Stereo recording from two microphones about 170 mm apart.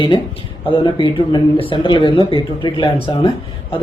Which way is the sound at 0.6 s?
30° left (ahead or behind).